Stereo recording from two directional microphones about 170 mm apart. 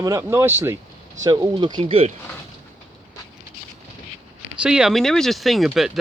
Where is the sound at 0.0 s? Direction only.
15° right (ahead or behind); by 2.1 s 35° right (ahead or behind).